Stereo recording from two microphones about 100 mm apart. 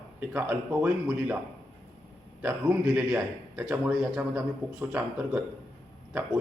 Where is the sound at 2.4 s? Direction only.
20° right (ahead or behind).